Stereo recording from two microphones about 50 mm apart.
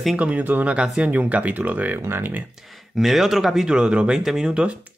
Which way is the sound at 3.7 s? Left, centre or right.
Centre.